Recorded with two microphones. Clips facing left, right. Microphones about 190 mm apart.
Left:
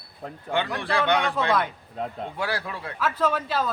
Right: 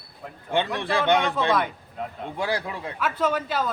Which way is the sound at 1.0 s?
20° right (ahead or behind).